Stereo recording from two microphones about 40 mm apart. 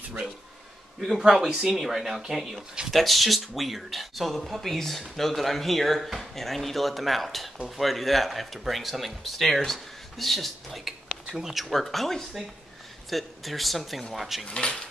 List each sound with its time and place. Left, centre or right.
1.2 s speech: centre
1.8 s speech: centre
14.4 s speech: centre